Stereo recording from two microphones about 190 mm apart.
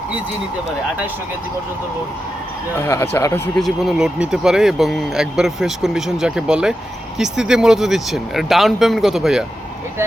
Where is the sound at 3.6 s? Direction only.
Centre (ahead or behind).